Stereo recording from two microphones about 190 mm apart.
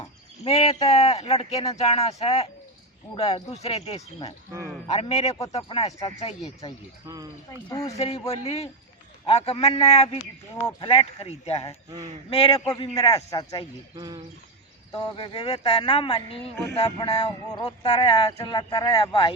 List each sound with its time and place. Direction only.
0.4 s speech: 35° left (ahead or behind)
3.5 s speech: 35° left (ahead or behind)
5.3 s speech: 20° left (ahead or behind)
7.7 s speech: 20° left (ahead or behind)
7.9 s speech: 30° left (ahead or behind)
12.5 s speech: 20° left (ahead or behind)
13.9 s speech: 20° right (ahead or behind)
14.9 s speech: 25° left (ahead or behind)